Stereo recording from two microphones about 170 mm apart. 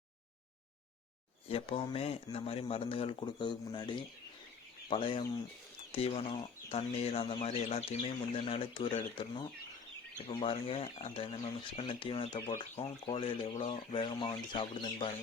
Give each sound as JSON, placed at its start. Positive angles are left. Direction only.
{"t": 1.5, "sound": "speech", "side_deg": 30}